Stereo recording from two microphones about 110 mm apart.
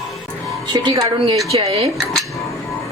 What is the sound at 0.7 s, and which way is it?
Speech, 35° right (ahead or behind).